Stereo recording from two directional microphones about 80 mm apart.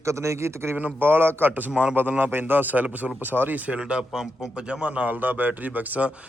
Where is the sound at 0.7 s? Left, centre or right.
Right.